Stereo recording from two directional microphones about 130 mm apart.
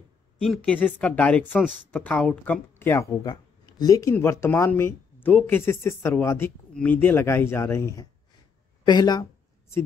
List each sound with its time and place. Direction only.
0.4 s speech: 5° left (ahead or behind); by 3.3 s 20° left (ahead or behind)
3.3 s a sound: 30° left (ahead or behind)
4.1 s speech: 20° left (ahead or behind)